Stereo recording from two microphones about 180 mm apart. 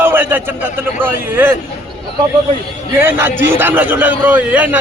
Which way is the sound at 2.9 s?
10° right (ahead or behind).